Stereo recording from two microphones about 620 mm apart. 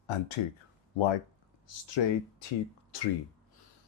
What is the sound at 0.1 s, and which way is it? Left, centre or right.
Speech, left.